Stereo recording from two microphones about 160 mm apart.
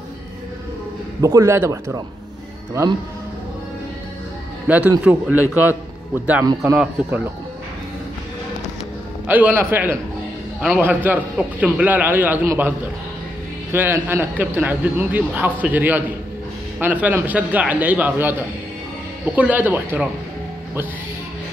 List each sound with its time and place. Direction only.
1.2 s a man's voice: 20° right (ahead or behind)
4.6 s a man's voice: 10° right (ahead or behind)
9.3 s a man's voice: 10° right (ahead or behind)
19.3 s a man's voice: 10° right (ahead or behind)